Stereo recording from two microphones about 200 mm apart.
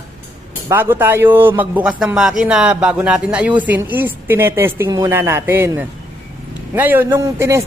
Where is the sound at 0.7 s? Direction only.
10° right (ahead or behind).